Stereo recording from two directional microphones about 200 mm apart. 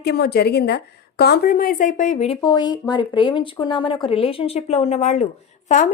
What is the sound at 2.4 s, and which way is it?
Speech, 20° left (ahead or behind).